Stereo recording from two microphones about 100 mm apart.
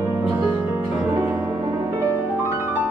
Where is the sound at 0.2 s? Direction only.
10° right (ahead or behind).